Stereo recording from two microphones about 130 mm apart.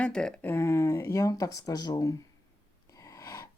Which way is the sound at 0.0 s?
5° left (ahead or behind).